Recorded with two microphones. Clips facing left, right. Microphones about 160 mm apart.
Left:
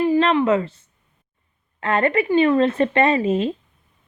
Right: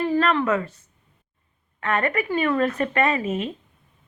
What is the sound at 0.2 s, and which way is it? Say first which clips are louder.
Speech: left 4 dB; 25° left (ahead or behind).